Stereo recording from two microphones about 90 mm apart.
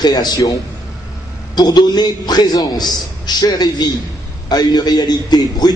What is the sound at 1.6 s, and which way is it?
A man's voice, 50° left (ahead or behind).